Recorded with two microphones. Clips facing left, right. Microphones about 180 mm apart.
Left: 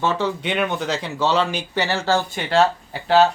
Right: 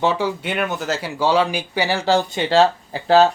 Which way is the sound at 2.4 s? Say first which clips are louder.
Right 2 dB; 35° right (ahead or behind).